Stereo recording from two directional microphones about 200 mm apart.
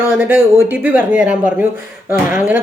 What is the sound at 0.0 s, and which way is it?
Speech, 10° right (ahead or behind).